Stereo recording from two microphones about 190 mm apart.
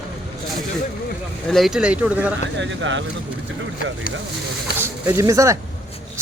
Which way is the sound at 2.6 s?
75° right (ahead or behind).